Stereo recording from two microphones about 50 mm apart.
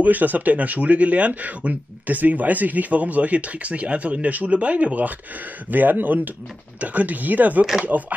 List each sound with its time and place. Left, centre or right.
0.0 s speech: right